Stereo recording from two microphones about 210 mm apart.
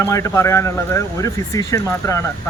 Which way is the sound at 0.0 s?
15° left (ahead or behind).